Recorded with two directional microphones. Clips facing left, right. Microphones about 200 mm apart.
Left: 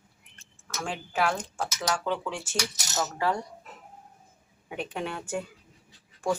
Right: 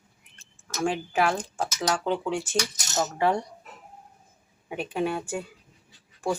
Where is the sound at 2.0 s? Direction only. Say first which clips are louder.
Right 4 dB; 20° right (ahead or behind).